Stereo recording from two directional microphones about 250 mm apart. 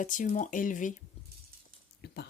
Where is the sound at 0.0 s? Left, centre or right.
Left.